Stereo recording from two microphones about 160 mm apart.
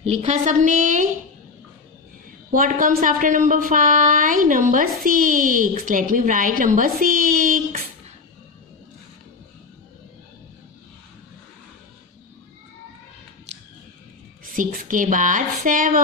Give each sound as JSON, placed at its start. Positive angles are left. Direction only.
{"t": 0.0, "sound": "a woman's voice", "side_deg": -45}
{"t": 2.5, "sound": "a woman's voice", "side_deg": -60}
{"t": 14.5, "sound": "a woman's voice", "side_deg": -60}